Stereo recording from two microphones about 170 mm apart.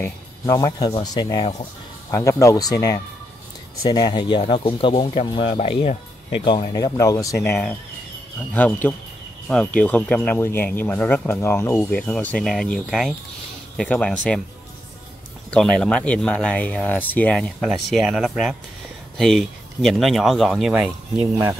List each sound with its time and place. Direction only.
0.0 s speech: 20° left (ahead or behind)
8.5 s speech: 10° left (ahead or behind)
15.5 s speech: 5° left (ahead or behind)